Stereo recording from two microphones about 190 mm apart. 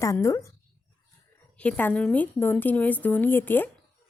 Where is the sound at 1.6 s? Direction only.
10° left (ahead or behind).